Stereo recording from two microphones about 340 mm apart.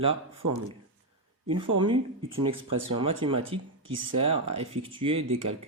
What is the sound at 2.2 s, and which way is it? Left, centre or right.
Speech, right.